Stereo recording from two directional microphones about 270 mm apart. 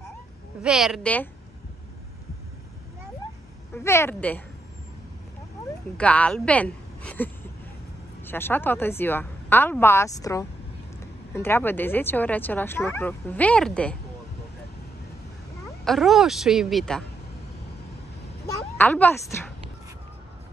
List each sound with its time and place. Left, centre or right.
0.6 s a woman's voice: centre
3.7 s speech: centre
5.9 s a woman's voice: centre
8.3 s speech: centre
15.8 s a woman's voice: centre
18.8 s speech: centre